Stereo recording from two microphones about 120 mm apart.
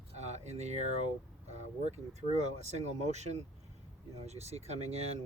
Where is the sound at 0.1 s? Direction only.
70° right (ahead or behind).